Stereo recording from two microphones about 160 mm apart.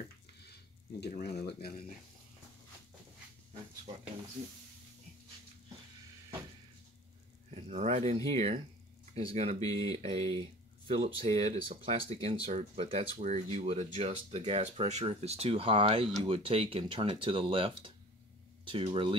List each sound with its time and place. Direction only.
1.0 s speech: 90° left
7.5 s speech: 45° right (ahead or behind)